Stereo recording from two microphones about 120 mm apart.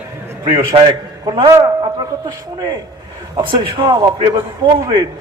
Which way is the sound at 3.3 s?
45° right (ahead or behind).